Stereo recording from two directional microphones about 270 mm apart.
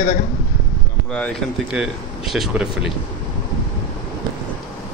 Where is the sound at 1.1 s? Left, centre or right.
Centre.